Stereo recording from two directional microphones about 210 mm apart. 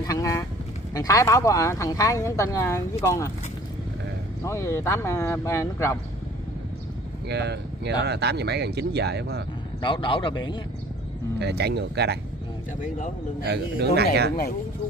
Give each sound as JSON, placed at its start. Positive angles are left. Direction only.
{"t": 0.0, "sound": "speech", "side_deg": 15}
{"t": 4.5, "sound": "speech", "side_deg": 15}
{"t": 7.2, "sound": "speech", "side_deg": -55}
{"t": 9.8, "sound": "a man's voice", "side_deg": 25}
{"t": 11.3, "sound": "speech", "side_deg": -55}
{"t": 12.8, "sound": "a man's voice", "side_deg": 40}
{"t": 13.4, "sound": "speech", "side_deg": -50}